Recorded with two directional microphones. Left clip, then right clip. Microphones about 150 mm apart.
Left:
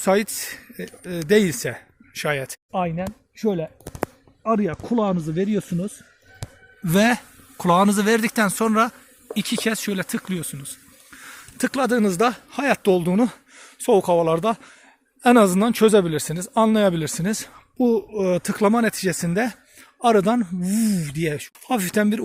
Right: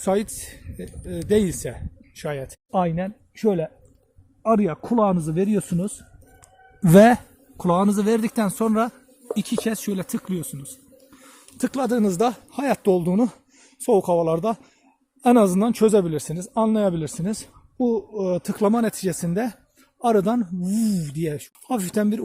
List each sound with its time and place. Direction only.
0.0 s speech: centre (ahead or behind)
3.4 s speech: 15° right (ahead or behind)
7.5 s speech: 10° right (ahead or behind)